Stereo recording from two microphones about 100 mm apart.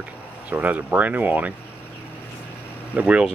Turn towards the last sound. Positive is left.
turn(degrees=-15)  # may be behind; listen again after turning